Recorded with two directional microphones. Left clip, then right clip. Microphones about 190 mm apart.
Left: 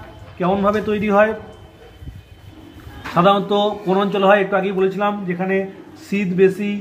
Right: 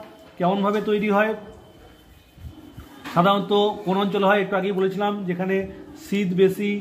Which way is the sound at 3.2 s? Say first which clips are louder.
Left 4 dB; 25° right (ahead or behind).